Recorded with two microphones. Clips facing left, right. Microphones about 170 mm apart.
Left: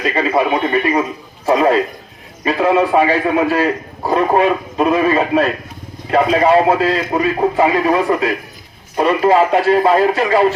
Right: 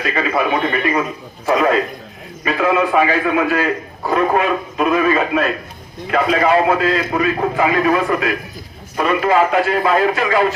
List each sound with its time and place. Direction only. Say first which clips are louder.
0.0 s a man's voice: left 3 dB; 30° left (ahead or behind)